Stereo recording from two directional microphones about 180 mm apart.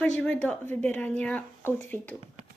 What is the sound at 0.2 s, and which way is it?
A woman's voice, 5° left (ahead or behind).